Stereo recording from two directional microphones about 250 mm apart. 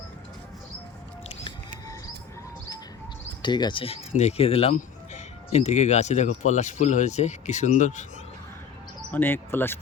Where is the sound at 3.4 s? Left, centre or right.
Centre.